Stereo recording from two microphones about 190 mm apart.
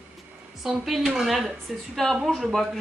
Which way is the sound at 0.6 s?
Centre (ahead or behind).